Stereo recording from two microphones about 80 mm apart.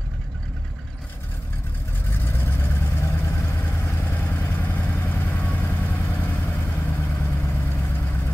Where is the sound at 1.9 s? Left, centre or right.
Left.